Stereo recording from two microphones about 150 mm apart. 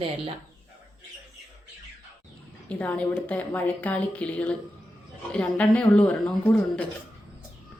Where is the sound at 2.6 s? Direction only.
10° left (ahead or behind).